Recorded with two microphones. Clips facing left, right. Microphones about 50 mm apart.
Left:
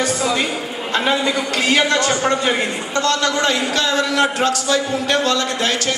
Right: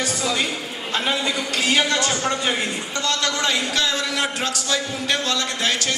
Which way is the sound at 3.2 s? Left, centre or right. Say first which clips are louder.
Left 5 dB; left.